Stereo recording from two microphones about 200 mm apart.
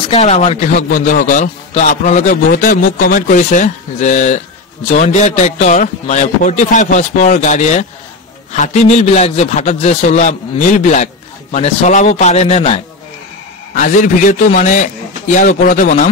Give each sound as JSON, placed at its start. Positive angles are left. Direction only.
{"t": 0.1, "sound": "a man's voice", "side_deg": 35}